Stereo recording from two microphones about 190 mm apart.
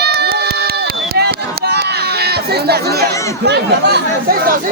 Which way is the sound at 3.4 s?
60° right (ahead or behind).